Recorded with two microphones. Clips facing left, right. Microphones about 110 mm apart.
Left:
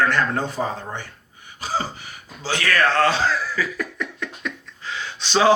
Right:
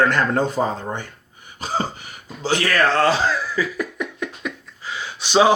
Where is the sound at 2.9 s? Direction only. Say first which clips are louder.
Right 2 dB; 40° right (ahead or behind).